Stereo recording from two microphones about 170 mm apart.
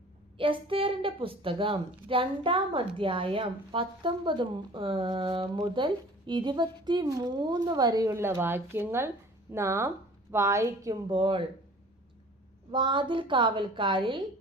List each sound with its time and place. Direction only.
0.3 s a woman's voice: 30° right (ahead or behind)
12.7 s a woman's voice: 30° right (ahead or behind)